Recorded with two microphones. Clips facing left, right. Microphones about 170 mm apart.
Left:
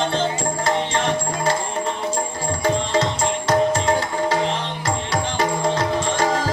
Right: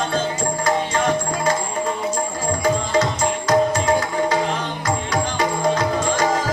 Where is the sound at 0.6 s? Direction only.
25° left (ahead or behind).